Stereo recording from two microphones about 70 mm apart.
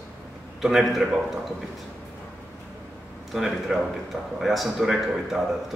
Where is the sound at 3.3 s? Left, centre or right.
Centre.